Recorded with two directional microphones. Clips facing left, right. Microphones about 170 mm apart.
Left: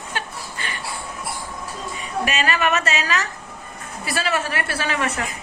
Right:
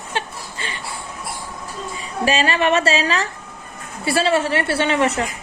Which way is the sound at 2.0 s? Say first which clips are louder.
Right 4 dB; 30° right (ahead or behind).